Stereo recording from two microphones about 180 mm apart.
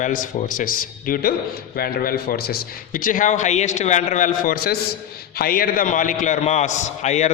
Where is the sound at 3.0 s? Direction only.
45° left (ahead or behind).